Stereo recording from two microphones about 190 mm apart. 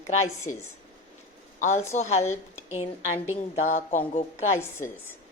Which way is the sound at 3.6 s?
40° left (ahead or behind).